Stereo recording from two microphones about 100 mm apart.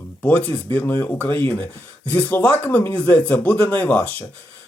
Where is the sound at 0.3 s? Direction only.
15° left (ahead or behind).